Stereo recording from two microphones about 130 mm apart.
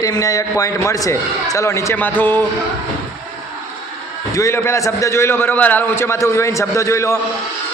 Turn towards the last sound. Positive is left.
turn(degrees=20)  # may be behind; listen again after turning